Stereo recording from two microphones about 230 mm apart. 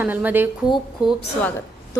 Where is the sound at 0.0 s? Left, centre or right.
Centre.